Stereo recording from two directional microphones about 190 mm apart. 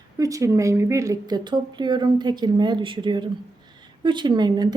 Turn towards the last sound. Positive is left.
turn(degrees=-20)  # may be behind; listen again after turning